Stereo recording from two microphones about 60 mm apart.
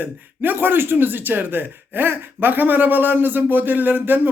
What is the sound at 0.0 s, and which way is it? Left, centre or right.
Speech, right.